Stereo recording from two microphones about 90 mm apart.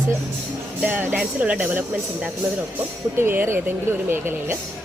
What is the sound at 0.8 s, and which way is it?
Speech, 20° right (ahead or behind).